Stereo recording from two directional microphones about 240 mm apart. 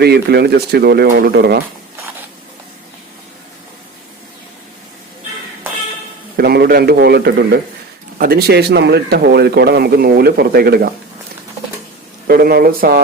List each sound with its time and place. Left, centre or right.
0.0 s a man's voice: right
6.3 s a man's voice: right
12.3 s a man's voice: right